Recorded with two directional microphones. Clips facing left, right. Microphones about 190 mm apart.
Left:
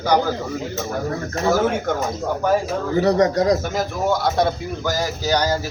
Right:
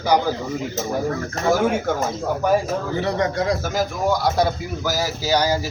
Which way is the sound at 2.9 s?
40° left (ahead or behind).